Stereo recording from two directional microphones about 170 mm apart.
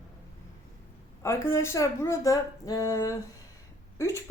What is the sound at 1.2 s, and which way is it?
A woman's voice, 15° left (ahead or behind).